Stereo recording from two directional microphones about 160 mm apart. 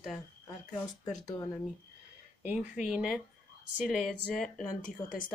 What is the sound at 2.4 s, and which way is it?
Speech, 5° right (ahead or behind).